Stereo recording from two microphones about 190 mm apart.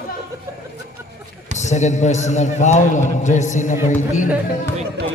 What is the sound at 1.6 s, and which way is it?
A man's voice, 40° left (ahead or behind).